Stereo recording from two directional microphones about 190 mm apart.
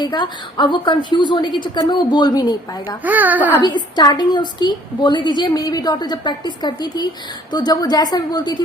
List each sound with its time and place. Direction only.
0.0 s a woman's voice: 25° left (ahead or behind)
3.0 s a child's voice: 10° right (ahead or behind)
3.6 s a woman's voice: 25° left (ahead or behind)